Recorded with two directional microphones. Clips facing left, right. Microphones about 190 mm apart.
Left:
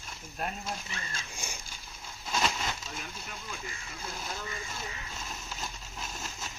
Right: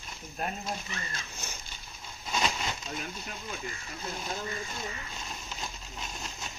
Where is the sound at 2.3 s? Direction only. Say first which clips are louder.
Even; 5° right (ahead or behind).